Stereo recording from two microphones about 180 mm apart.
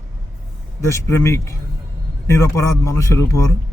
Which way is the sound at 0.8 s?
15° left (ahead or behind).